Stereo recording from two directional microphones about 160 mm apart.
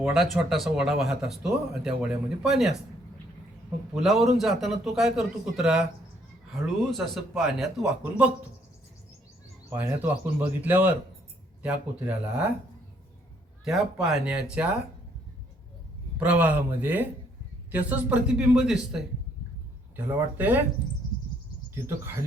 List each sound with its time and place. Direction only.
0.0 s speech: centre (ahead or behind)
4.0 s speech: centre (ahead or behind)
9.6 s speech: 10° right (ahead or behind)
13.7 s speech: centre (ahead or behind)
16.1 s speech: 10° right (ahead or behind)
20.1 s speech: 10° right (ahead or behind)
21.8 s speech: 15° right (ahead or behind)